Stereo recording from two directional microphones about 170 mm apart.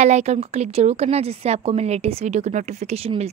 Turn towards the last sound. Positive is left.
turn(degrees=-35)  # may be behind; listen again after turning